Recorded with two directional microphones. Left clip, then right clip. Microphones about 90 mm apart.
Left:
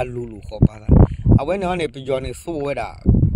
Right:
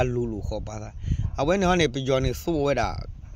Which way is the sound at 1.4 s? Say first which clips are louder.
Right 1 dB; 25° left (ahead or behind).